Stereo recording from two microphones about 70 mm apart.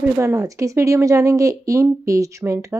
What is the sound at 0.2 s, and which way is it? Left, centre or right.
Speech, right.